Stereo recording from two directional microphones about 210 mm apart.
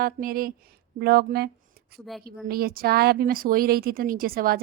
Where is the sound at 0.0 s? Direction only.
45° right (ahead or behind).